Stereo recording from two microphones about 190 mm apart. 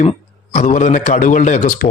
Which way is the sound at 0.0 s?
40° left (ahead or behind).